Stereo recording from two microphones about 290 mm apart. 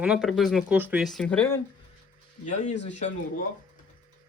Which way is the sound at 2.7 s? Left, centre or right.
Left.